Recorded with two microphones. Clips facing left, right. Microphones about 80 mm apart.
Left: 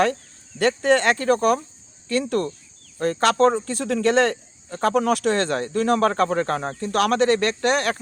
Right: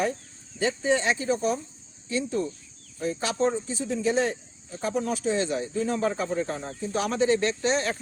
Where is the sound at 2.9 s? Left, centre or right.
Left.